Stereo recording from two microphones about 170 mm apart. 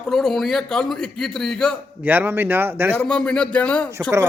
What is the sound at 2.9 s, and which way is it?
Speech, 5° left (ahead or behind).